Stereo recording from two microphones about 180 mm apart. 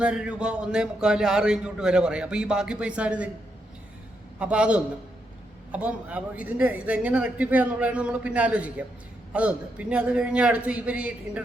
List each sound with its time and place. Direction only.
0.0 s a man's voice: 5° right (ahead or behind)
4.4 s a man's voice: 5° right (ahead or behind)